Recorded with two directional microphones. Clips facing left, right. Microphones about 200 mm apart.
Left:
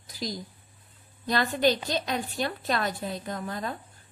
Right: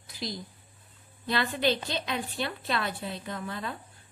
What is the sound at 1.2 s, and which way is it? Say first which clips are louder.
A woman's voice: left 3 dB; 40° left (ahead or behind).